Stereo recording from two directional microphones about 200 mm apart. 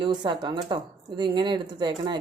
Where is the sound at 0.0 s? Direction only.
25° right (ahead or behind).